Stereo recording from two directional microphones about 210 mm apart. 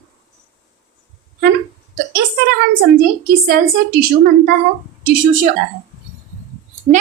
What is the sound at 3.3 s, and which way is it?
A woman's voice, 45° right (ahead or behind).